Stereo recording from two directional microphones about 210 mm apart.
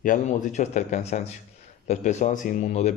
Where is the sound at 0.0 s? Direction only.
40° left (ahead or behind).